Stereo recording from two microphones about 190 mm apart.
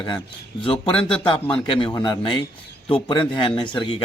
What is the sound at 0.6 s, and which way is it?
Speech, 30° left (ahead or behind).